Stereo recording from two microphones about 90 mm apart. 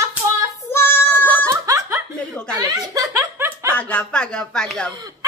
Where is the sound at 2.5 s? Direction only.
45° right (ahead or behind).